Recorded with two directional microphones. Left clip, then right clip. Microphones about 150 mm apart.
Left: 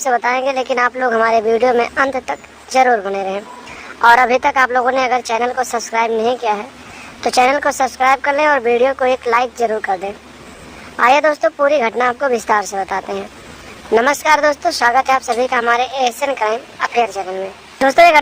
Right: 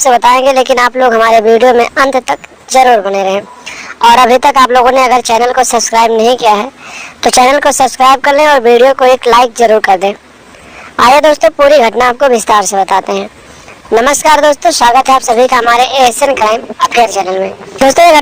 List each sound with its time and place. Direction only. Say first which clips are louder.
0.0 s speech: right 10 dB; 35° right (ahead or behind)